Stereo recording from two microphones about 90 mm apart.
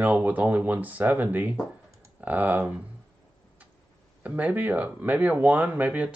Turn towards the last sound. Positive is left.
turn(degrees=-15)  # may be behind; listen again after turning